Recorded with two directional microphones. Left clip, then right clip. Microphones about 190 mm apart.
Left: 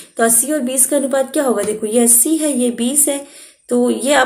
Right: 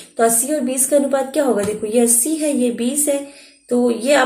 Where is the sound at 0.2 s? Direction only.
40° left (ahead or behind).